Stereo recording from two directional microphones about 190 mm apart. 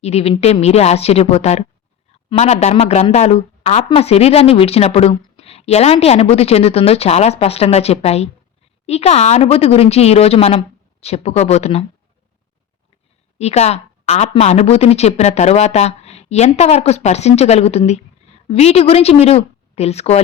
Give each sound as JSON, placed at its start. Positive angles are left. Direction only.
{"t": 0.0, "sound": "a woman's voice", "side_deg": 35}
{"t": 13.4, "sound": "a woman's voice", "side_deg": 35}